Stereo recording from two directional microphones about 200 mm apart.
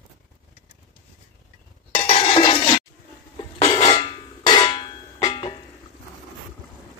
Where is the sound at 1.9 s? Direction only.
30° left (ahead or behind).